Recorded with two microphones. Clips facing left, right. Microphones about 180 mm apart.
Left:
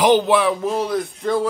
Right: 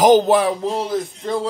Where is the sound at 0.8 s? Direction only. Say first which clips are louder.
Left 1 dB; 25° right (ahead or behind).